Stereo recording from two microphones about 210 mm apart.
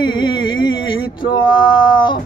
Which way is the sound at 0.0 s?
20° left (ahead or behind).